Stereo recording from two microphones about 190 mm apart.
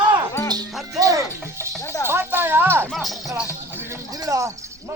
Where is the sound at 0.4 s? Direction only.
20° right (ahead or behind).